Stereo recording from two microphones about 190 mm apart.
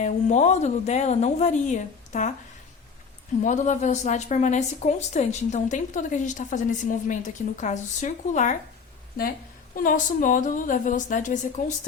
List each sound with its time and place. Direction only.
0.0 s a woman's voice: 40° left (ahead or behind)
3.4 s a woman's voice: 40° left (ahead or behind)
9.7 s a woman's voice: 45° left (ahead or behind)